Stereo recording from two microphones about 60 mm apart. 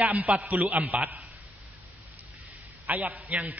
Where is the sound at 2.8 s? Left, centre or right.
Right.